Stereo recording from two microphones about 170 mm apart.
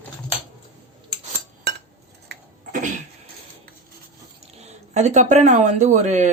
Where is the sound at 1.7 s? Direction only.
75° right (ahead or behind).